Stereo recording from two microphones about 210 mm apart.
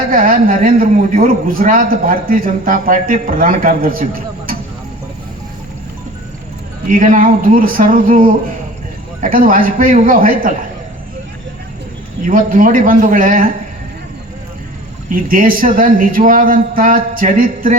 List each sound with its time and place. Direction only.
0.1 s a man's voice: 40° right (ahead or behind)
6.8 s speech: 40° right (ahead or behind)
12.2 s speech: 40° right (ahead or behind)
15.1 s speech: 40° right (ahead or behind)